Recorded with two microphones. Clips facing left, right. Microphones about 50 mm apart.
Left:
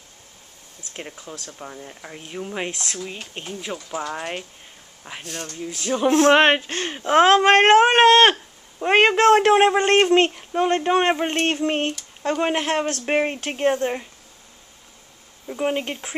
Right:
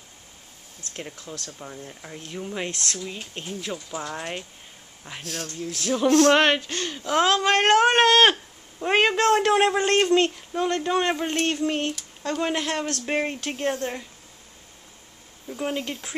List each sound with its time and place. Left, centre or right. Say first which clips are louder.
0.9 s speech: left 1 dB; centre
2.7 s speech: left 1 dB; centre
5.0 s speech: left 1 dB; centre
6.0 s speech: left 2 dB; left
7.7 s speech: left 2 dB; centre
8.9 s speech: left 5 dB; left
13.7 s speech: left 7 dB; centre
15.4 s speech: left 5 dB; left